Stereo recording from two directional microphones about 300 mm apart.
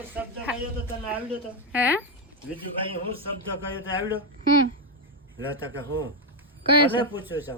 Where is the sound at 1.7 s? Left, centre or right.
Centre.